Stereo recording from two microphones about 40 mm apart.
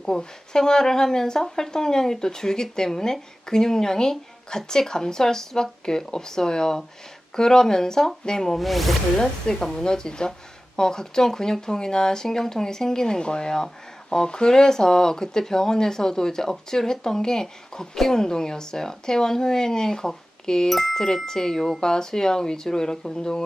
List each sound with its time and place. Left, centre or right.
0.0 s speech: centre
8.5 s speech: centre
9.1 s speech: centre